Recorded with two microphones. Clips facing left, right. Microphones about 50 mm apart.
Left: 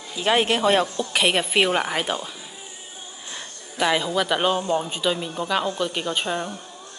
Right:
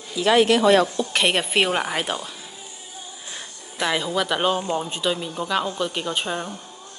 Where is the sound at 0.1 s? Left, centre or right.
Left.